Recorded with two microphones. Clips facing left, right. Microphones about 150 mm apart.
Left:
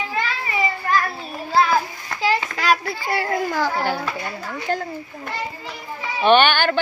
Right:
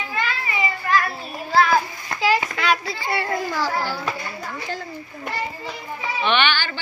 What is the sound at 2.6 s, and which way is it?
A child's voice, 40° left (ahead or behind).